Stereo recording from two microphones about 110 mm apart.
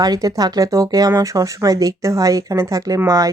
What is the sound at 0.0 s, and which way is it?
Speech, 35° right (ahead or behind).